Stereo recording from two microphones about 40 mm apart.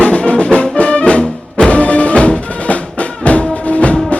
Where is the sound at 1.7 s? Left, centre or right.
Left.